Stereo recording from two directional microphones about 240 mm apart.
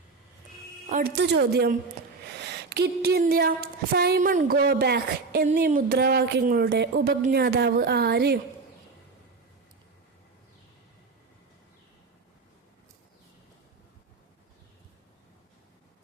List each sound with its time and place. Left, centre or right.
0.9 s speech: right
2.4 s a sound: right
3.9 s speech: right